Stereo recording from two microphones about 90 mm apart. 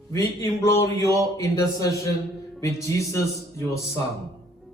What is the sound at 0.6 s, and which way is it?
Speech, 35° left (ahead or behind).